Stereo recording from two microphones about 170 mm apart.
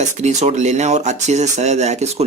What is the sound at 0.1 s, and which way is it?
Speech, 45° right (ahead or behind).